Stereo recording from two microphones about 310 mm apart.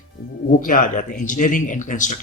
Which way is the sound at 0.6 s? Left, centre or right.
Left.